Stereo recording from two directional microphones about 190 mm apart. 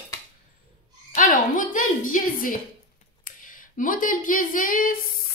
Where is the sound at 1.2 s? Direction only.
45° left (ahead or behind).